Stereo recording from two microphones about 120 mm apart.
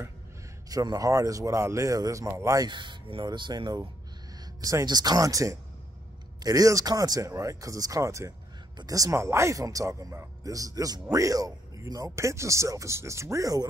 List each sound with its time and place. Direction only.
0.7 s speech: 30° right (ahead or behind)